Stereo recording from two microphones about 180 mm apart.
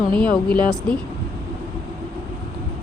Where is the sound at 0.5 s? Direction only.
5° left (ahead or behind).